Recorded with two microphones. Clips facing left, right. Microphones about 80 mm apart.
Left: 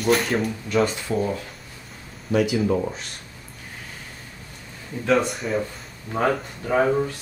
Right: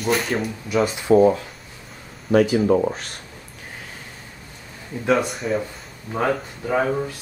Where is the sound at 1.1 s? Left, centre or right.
Right.